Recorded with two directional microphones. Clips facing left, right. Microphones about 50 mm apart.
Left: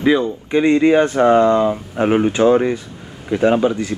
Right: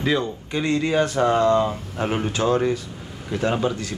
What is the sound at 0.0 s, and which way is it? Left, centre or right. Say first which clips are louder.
A man's voice: left 7 dB; centre.